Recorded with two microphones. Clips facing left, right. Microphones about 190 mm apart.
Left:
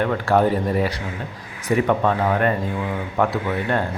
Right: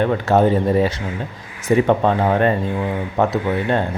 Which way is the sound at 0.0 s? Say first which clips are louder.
Right 3 dB; 20° right (ahead or behind).